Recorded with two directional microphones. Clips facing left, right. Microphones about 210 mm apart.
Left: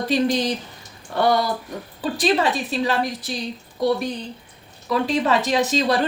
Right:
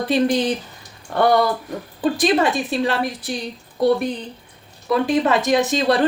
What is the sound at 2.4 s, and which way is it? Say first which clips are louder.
Speech: right 2 dB; 50° right (ahead or behind).